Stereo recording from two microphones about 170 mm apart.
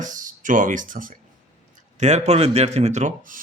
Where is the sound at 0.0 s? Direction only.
50° right (ahead or behind).